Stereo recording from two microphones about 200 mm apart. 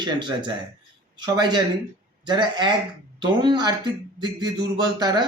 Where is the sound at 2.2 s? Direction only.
20° right (ahead or behind).